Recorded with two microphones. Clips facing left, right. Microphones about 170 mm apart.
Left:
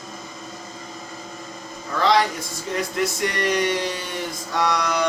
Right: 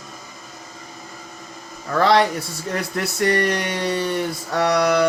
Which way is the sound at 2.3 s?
65° right (ahead or behind).